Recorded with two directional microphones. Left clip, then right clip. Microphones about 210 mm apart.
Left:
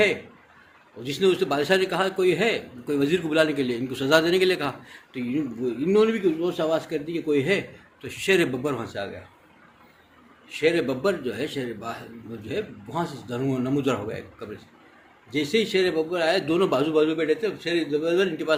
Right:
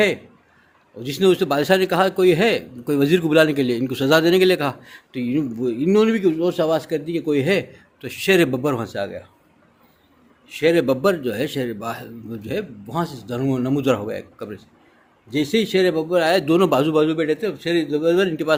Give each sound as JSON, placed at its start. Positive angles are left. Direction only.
{"t": 0.9, "sound": "a man's voice", "side_deg": -55}
{"t": 10.5, "sound": "a man's voice", "side_deg": -55}